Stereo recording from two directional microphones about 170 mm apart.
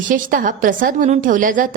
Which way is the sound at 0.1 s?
55° right (ahead or behind).